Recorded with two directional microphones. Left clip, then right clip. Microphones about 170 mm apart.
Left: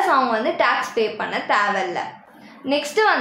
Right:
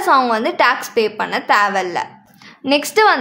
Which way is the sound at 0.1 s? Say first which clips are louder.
Right 4 dB; 50° right (ahead or behind).